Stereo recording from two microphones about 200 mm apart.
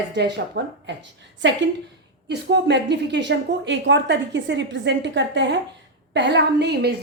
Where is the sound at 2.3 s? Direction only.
60° right (ahead or behind).